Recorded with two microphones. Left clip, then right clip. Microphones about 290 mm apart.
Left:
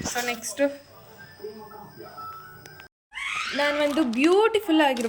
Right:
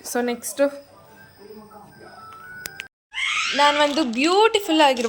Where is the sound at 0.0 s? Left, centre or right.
Right.